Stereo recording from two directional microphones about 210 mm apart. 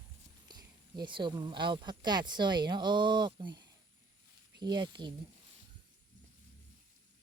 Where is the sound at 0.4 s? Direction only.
20° right (ahead or behind).